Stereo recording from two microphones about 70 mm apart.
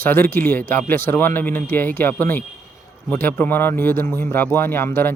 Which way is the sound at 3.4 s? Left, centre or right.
Left.